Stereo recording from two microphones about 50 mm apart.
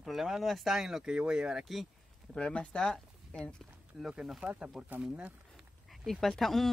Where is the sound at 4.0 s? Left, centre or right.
Centre.